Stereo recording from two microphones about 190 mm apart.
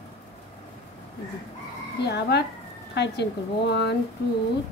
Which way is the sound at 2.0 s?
60° left (ahead or behind).